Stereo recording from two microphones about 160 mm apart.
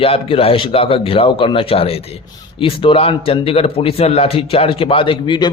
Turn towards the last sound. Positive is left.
turn(degrees=30)  # may be behind; listen again after turning